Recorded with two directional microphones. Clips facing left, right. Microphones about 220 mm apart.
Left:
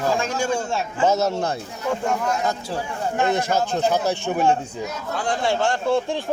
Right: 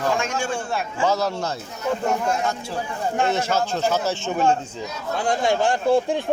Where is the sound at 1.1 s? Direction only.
20° left (ahead or behind).